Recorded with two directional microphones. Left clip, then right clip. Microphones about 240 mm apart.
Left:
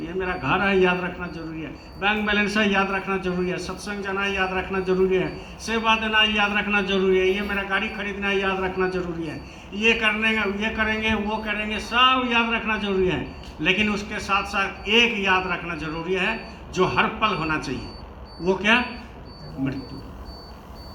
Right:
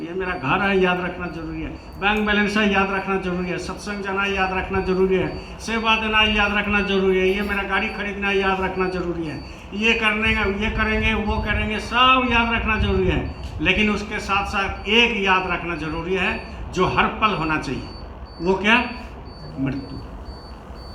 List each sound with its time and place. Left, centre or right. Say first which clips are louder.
0.2 s a man's voice: right 1 dB; left